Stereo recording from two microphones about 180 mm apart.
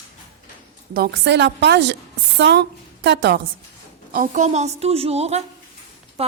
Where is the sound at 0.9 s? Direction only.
60° right (ahead or behind).